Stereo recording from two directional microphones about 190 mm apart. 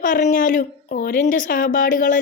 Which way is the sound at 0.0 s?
40° left (ahead or behind).